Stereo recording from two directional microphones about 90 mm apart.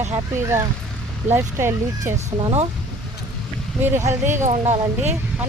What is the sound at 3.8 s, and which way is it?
Speech, 25° right (ahead or behind).